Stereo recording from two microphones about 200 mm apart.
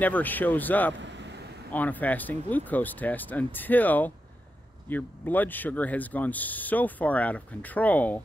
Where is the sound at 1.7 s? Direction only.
10° left (ahead or behind).